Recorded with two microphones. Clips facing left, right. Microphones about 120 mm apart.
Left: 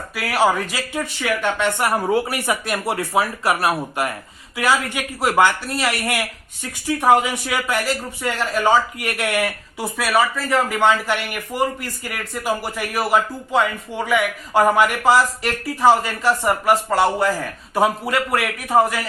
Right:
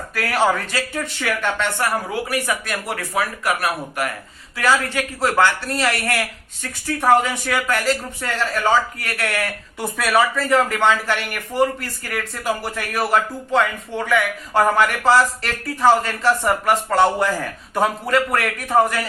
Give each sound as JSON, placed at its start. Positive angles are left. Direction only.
{"t": 0.1, "sound": "speech", "side_deg": 10}
{"t": 1.8, "sound": "speech", "side_deg": 25}
{"t": 9.7, "sound": "speech", "side_deg": 0}